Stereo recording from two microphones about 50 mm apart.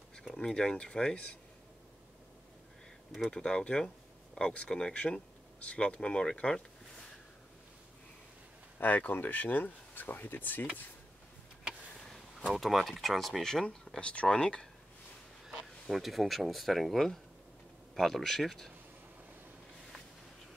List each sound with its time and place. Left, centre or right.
0.3 s speech: centre
3.3 s speech: centre
8.7 s speech: left
12.5 s speech: centre
13.4 s speech: centre
15.4 s speech: centre